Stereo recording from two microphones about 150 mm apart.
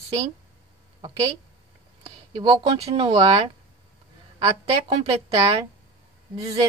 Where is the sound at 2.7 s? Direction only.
40° right (ahead or behind).